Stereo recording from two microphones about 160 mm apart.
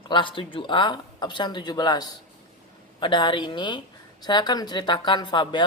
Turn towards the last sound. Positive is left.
turn(degrees=30)  # may be behind; listen again after turning